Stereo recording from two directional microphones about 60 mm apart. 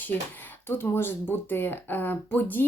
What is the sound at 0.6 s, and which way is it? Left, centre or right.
Speech, left.